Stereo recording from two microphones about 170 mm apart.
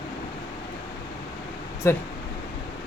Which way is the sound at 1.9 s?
15° left (ahead or behind).